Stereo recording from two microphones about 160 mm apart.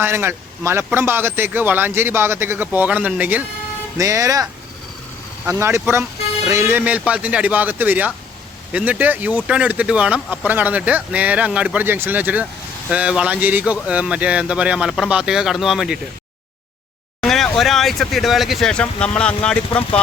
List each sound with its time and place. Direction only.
0.0 s speech: 15° right (ahead or behind)
5.5 s speech: 15° right (ahead or behind)
17.2 s a sound: centre (ahead or behind)
17.6 s speech: centre (ahead or behind)